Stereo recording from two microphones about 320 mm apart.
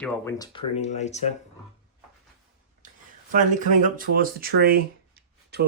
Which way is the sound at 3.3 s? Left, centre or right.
Right.